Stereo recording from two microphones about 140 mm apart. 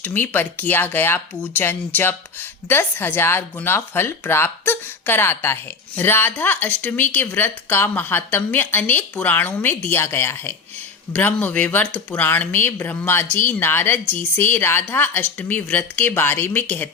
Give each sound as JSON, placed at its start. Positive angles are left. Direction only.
{"t": 0.0, "sound": "speech", "side_deg": 15}